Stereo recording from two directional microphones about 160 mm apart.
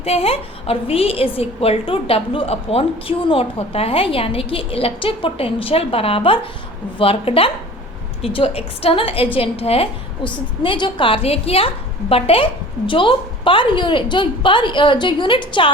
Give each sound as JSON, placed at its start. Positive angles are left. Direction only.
{"t": 0.0, "sound": "a woman's voice", "side_deg": 40}